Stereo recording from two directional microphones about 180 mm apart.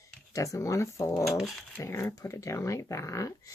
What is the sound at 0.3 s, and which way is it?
Speech, 15° left (ahead or behind).